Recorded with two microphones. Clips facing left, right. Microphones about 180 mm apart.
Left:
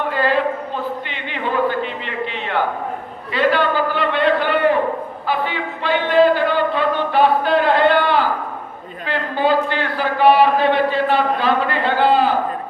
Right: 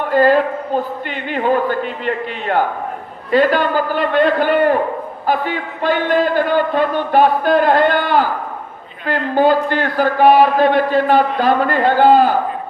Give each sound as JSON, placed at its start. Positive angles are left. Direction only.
{"t": 0.1, "sound": "a man's voice", "side_deg": -45}